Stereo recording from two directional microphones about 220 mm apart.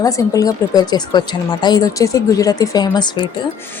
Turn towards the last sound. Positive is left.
turn(degrees=20)  # may be behind; listen again after turning